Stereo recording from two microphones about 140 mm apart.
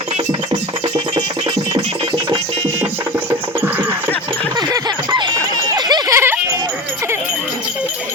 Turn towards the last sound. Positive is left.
turn(degrees=-20)  # may be behind; listen again after turning